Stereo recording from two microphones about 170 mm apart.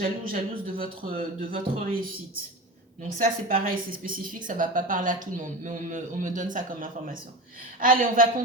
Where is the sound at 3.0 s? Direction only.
55° right (ahead or behind).